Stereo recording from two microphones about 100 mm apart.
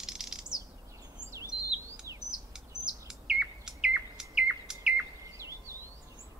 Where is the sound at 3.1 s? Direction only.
5° right (ahead or behind).